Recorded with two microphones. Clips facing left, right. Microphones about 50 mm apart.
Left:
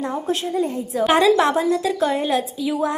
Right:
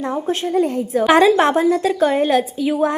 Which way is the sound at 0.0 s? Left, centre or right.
Right.